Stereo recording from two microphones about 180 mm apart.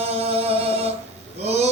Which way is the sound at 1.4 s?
35° right (ahead or behind).